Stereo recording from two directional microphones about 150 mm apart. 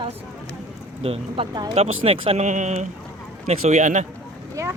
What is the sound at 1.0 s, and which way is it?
Speech, 40° right (ahead or behind).